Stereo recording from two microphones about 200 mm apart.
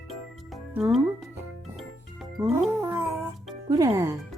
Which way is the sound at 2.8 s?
10° right (ahead or behind).